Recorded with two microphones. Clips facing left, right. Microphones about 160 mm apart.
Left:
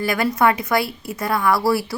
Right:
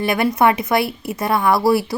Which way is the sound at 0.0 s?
25° right (ahead or behind).